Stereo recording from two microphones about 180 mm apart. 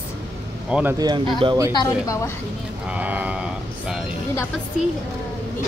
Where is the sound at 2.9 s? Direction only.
10° right (ahead or behind).